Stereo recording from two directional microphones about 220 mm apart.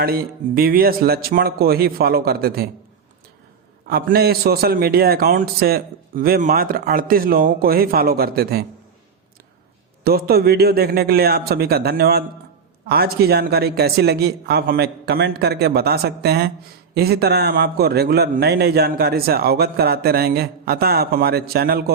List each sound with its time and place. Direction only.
0.0 s a man's voice: 45° right (ahead or behind)
3.8 s a man's voice: 45° right (ahead or behind)
10.0 s a man's voice: 45° right (ahead or behind)